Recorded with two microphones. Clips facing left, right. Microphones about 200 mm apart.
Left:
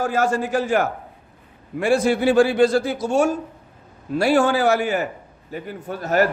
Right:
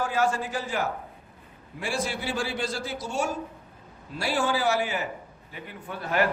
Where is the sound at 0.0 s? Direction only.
45° left (ahead or behind).